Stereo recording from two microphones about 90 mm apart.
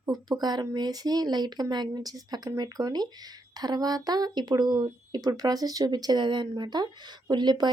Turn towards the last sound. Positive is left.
turn(degrees=-55)  # may be behind; listen again after turning